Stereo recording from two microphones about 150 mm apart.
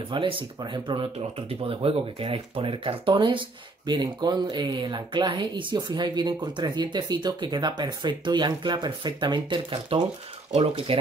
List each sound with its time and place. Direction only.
0.1 s speech: 35° right (ahead or behind)
10.5 s speech: 45° right (ahead or behind)